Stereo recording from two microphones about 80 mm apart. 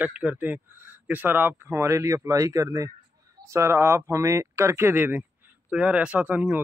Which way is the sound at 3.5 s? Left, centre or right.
Right.